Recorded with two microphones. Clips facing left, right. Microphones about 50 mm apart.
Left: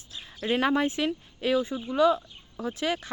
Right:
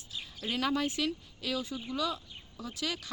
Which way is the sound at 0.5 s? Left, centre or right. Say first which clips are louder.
Left 7 dB; left.